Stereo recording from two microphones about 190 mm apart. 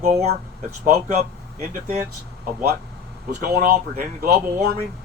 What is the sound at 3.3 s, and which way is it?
Speech, 50° right (ahead or behind).